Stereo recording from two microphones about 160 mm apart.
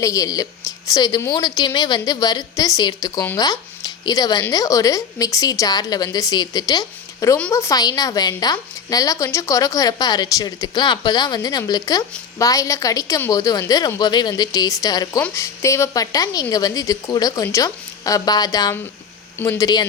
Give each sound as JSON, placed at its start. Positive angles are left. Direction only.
{"t": 0.0, "sound": "a woman's voice", "side_deg": 20}